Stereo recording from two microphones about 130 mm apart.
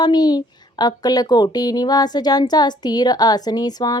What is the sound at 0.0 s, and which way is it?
A woman's voice, 30° left (ahead or behind).